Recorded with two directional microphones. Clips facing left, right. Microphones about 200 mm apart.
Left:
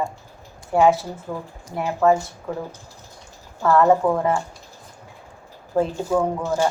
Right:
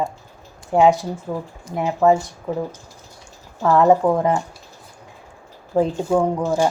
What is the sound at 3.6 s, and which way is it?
Speech, 15° right (ahead or behind).